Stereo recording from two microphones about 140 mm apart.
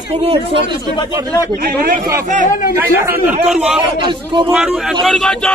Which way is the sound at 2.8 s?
15° right (ahead or behind).